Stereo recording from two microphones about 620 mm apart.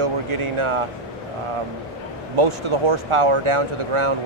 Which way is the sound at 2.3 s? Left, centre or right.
Right.